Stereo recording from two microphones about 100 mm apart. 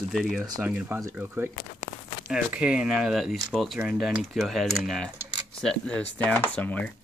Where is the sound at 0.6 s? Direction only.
15° right (ahead or behind).